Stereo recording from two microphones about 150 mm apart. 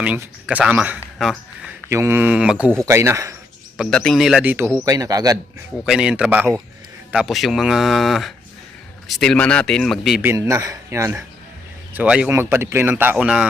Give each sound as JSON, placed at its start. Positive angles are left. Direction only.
{"t": 0.0, "sound": "a man's voice", "side_deg": -10}
{"t": 1.2, "sound": "a sound", "side_deg": 0}
{"t": 1.9, "sound": "a man's voice", "side_deg": -15}
{"t": 2.8, "sound": "a man's voice", "side_deg": -15}
{"t": 3.8, "sound": "speech", "side_deg": 5}
{"t": 4.8, "sound": "a man's voice", "side_deg": -20}
{"t": 5.8, "sound": "speech", "side_deg": -5}
{"t": 10.2, "sound": "a man's voice", "side_deg": -20}
{"t": 11.9, "sound": "a man's voice", "side_deg": -5}